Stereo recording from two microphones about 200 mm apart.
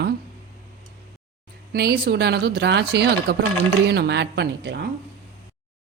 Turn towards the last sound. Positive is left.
turn(degrees=-60)  # may be behind; listen again after turning